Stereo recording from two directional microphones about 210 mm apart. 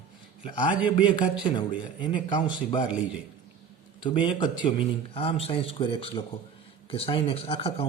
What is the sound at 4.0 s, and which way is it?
Speech, 20° left (ahead or behind).